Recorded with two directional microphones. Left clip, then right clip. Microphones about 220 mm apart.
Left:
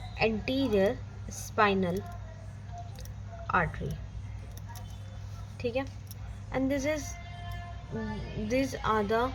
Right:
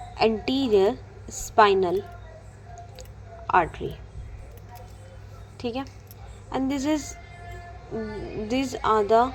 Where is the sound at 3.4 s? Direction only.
15° right (ahead or behind).